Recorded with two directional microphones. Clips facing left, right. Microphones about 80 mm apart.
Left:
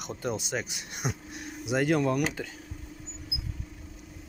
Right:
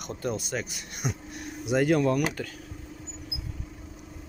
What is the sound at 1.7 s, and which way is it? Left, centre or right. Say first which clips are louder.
Speech: right 2 dB; centre.